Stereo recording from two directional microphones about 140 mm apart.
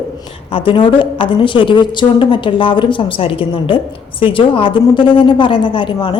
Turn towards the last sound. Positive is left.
turn(degrees=35)  # may be behind; listen again after turning